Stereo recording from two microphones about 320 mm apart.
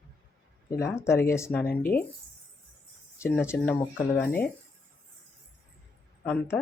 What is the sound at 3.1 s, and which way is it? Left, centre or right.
Speech, centre.